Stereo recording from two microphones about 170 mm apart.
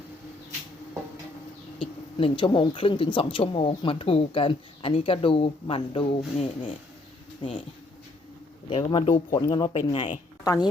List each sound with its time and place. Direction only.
1.8 s speech: 30° left (ahead or behind)
8.7 s a woman's voice: 30° left (ahead or behind)